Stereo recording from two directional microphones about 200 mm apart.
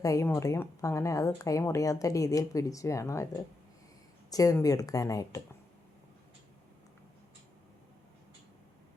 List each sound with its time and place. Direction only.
0.0 s speech: 15° left (ahead or behind)
4.3 s speech: 15° left (ahead or behind)